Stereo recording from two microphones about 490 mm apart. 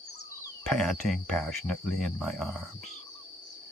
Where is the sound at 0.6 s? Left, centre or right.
Centre.